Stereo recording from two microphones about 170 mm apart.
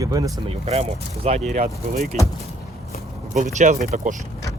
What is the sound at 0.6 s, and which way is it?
Speech, 35° right (ahead or behind).